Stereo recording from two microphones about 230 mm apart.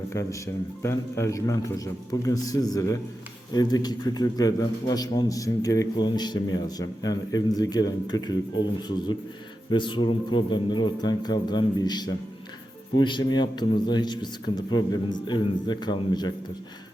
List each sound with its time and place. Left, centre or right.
0.1 s a man's voice: centre